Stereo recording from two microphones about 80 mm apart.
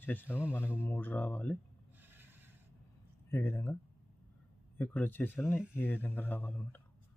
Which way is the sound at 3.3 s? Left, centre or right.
Left.